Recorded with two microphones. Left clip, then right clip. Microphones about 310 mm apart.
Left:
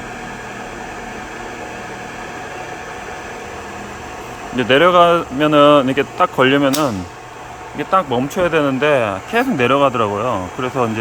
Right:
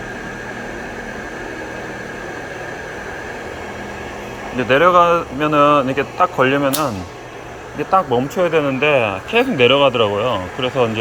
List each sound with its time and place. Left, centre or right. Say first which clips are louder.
4.5 s speech: left 1 dB; left